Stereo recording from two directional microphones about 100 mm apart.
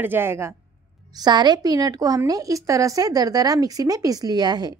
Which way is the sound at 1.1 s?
45° right (ahead or behind).